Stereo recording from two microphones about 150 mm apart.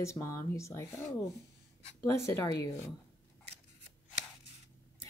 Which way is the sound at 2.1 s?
20° left (ahead or behind).